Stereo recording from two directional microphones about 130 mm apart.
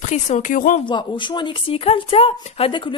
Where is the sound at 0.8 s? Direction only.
35° left (ahead or behind).